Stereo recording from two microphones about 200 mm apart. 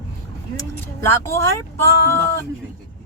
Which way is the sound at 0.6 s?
10° left (ahead or behind).